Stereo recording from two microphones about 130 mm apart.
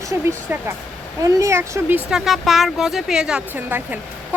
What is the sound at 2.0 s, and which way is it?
Speech, 5° right (ahead or behind).